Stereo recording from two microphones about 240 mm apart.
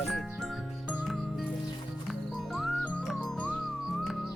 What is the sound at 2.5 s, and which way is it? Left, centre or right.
Music, centre.